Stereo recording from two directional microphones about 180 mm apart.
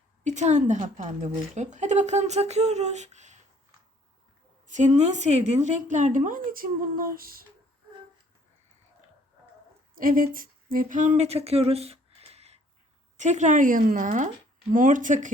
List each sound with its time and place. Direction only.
0.3 s a woman's voice: 40° right (ahead or behind)
4.6 s a woman's voice: 40° right (ahead or behind)
9.9 s a woman's voice: 50° right (ahead or behind)